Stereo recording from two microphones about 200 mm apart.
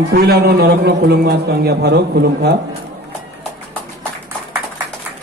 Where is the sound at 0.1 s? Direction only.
50° right (ahead or behind).